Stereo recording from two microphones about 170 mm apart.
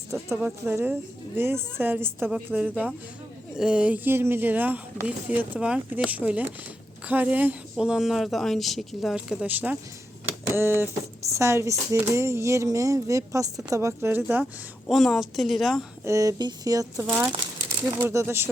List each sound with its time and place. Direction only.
0.1 s speech: 15° right (ahead or behind)
16.0 s speech: 20° right (ahead or behind)